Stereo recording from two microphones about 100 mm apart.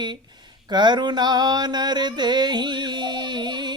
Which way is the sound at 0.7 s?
45° right (ahead or behind).